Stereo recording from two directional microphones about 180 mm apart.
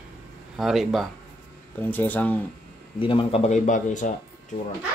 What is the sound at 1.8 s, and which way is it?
Speech, 10° left (ahead or behind).